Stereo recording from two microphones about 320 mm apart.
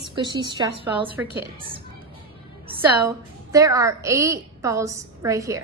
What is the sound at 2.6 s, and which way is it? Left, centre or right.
A woman's voice, centre.